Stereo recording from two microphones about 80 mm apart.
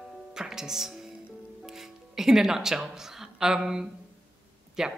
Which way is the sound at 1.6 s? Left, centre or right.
Centre.